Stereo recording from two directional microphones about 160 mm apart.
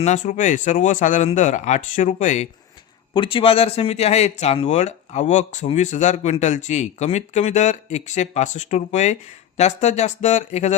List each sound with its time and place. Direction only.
0.0 s speech: 50° left (ahead or behind)
3.1 s speech: 30° left (ahead or behind)